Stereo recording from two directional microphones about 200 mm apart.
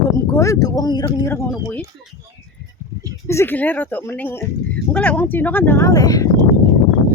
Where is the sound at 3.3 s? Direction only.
10° left (ahead or behind).